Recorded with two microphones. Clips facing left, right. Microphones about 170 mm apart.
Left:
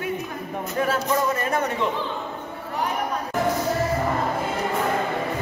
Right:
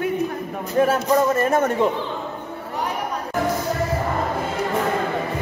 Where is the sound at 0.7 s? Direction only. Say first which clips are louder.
Right 6 dB; 40° right (ahead or behind).